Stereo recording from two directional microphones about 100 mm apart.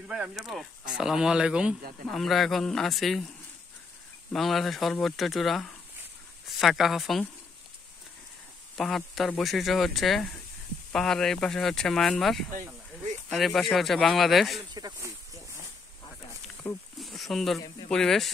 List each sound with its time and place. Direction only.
0.1 s speech: 5° right (ahead or behind)
4.3 s speech: centre (ahead or behind)
8.7 s speech: 5° left (ahead or behind)
14.7 s speech: 45° right (ahead or behind)
16.6 s speech: 10° left (ahead or behind)
17.0 s a sound: centre (ahead or behind)
17.8 s speech: 5° left (ahead or behind)